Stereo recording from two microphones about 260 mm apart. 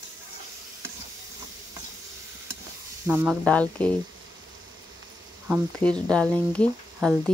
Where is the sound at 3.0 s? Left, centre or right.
Centre.